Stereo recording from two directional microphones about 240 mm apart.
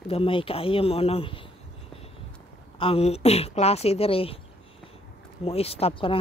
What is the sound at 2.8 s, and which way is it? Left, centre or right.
Speech, left.